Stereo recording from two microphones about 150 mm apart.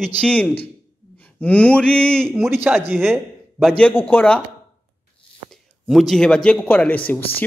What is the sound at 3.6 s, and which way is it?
Speech, 5° left (ahead or behind).